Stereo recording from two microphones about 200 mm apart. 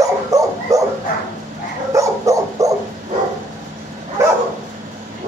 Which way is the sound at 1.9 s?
15° right (ahead or behind).